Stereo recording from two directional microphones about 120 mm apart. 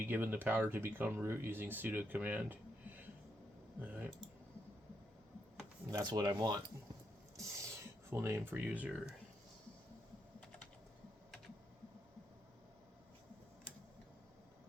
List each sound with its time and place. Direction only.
0.0 s speech: 15° right (ahead or behind)
5.8 s speech: 25° right (ahead or behind)
6.1 s speech: 35° right (ahead or behind); by 9.1 s 10° right (ahead or behind)